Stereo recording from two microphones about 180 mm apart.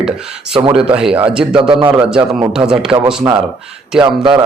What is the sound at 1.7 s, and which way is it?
Speech, 30° right (ahead or behind).